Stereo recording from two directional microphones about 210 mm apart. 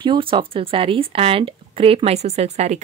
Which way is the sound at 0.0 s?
25° right (ahead or behind).